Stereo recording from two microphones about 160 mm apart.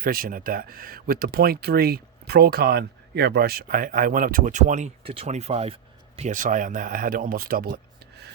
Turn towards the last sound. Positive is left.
turn(degrees=-65)  # may be behind; listen again after turning